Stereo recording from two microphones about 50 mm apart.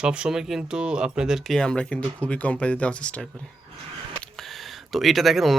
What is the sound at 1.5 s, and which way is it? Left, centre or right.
Speech, centre.